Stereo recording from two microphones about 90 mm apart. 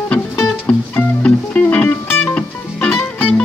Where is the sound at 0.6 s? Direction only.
15° left (ahead or behind).